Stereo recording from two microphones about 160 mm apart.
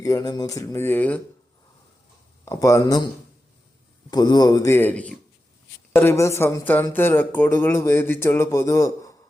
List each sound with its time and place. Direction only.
0.0 s speech: 20° left (ahead or behind)
2.4 s speech: 20° left (ahead or behind)
4.1 s speech: 25° left (ahead or behind)